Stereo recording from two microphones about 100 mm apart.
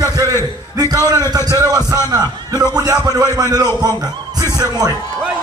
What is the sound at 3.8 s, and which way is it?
Speech, 40° right (ahead or behind).